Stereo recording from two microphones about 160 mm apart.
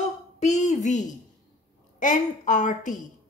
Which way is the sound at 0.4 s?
45° left (ahead or behind).